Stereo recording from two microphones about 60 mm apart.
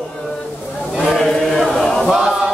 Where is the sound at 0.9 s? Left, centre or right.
Centre.